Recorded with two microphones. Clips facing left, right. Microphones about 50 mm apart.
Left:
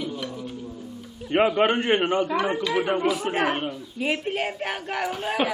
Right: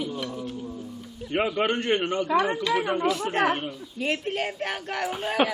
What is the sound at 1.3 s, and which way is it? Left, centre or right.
Speech, left.